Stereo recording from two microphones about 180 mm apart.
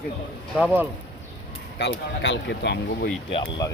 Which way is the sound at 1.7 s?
75° left (ahead or behind).